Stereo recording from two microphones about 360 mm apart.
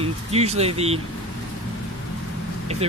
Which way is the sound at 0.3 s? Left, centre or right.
Centre.